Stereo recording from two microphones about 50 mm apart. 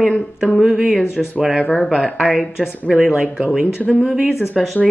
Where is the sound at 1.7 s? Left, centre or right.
Centre.